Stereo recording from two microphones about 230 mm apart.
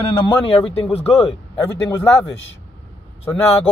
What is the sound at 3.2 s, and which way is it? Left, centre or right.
Speech, centre.